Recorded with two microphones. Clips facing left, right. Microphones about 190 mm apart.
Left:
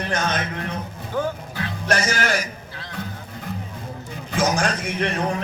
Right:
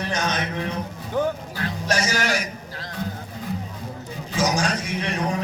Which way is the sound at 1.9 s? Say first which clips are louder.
Left 2 dB; 55° left (ahead or behind).